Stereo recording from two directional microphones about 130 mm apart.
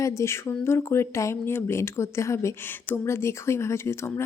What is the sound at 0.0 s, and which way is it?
Speech, 20° left (ahead or behind).